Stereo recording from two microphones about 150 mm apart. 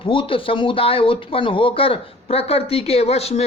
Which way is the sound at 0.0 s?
35° left (ahead or behind).